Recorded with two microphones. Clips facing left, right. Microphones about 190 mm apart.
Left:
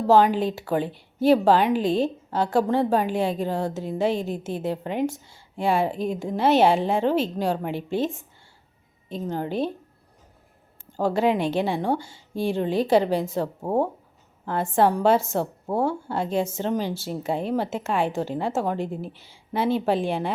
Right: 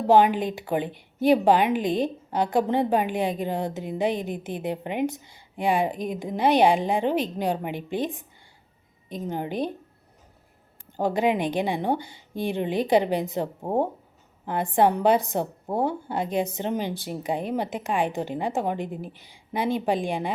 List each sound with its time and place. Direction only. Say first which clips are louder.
0.1 s a woman's voice: even; 15° right (ahead or behind)
10.9 s a woman's voice: left 1 dB; 20° right (ahead or behind)